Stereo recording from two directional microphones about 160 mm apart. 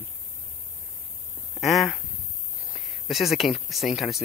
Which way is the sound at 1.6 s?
Centre (ahead or behind).